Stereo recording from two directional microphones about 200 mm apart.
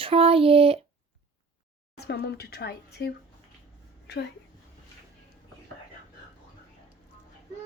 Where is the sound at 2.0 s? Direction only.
55° left (ahead or behind).